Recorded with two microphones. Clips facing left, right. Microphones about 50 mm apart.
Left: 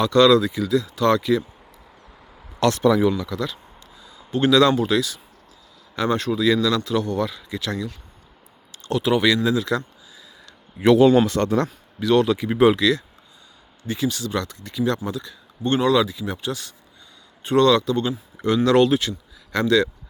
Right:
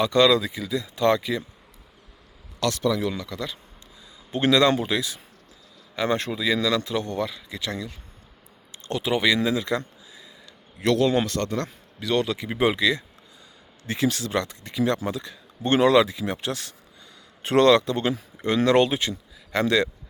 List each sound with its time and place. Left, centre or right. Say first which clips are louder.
0.0 s a man's voice: left 4 dB; centre
2.6 s speech: left 6 dB; left
3.2 s a man's voice: left 5 dB; centre; by 10.2 s right
10.8 s speech: left 7 dB; centre
11.9 s speech: left 6 dB; centre
13.8 s speech: even; right
18.4 s speech: left 3 dB; centre